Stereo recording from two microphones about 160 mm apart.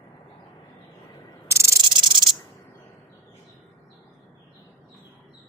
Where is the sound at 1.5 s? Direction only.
20° right (ahead or behind).